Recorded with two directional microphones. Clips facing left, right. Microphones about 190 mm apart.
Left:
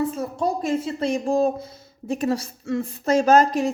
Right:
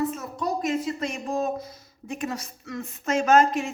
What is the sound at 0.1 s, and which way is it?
Speech, 30° left (ahead or behind).